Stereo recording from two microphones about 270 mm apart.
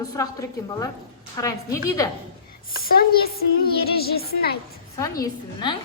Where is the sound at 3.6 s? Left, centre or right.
Left.